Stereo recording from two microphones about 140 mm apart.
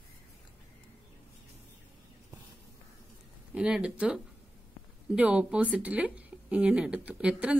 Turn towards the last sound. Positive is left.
turn(degrees=-10)  # may be behind; listen again after turning